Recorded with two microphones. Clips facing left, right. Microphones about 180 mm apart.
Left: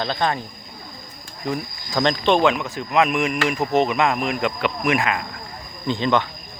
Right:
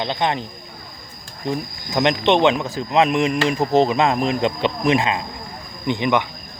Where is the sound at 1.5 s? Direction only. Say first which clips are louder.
Right 2 dB; 20° right (ahead or behind).